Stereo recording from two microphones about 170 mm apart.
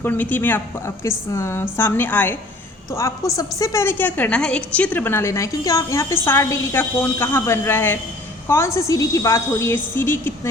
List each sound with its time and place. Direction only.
0.0 s a woman's voice: 10° left (ahead or behind)